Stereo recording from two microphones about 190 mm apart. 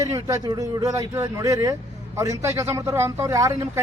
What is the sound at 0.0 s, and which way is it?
A man's voice, 15° right (ahead or behind).